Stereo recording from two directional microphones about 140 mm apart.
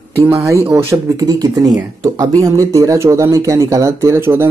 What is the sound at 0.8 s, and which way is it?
Speech, 25° right (ahead or behind).